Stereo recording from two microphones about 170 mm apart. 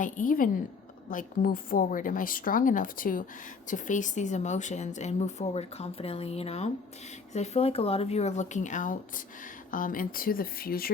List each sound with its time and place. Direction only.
0.0 s a woman's voice: 50° left (ahead or behind)